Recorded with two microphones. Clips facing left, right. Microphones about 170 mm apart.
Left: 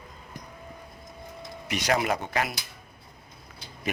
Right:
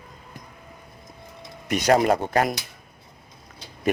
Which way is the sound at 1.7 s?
50° right (ahead or behind).